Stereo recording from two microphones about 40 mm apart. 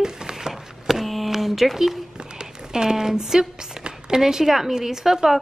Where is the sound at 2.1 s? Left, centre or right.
Centre.